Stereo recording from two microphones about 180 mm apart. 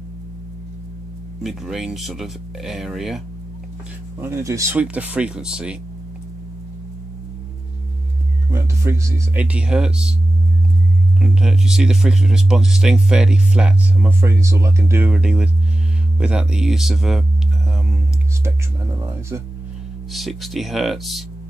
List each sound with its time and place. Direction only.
1.4 s speech: centre (ahead or behind)
4.2 s speech: 15° right (ahead or behind)
8.5 s speech: 15° right (ahead or behind)
11.1 s speech: 5° right (ahead or behind)
18.9 s speech: 15° right (ahead or behind)
20.1 s speech: centre (ahead or behind)